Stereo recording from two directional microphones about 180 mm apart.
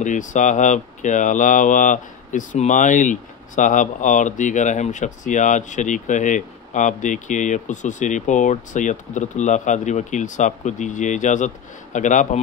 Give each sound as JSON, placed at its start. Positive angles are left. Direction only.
{"t": 0.0, "sound": "speech", "side_deg": 45}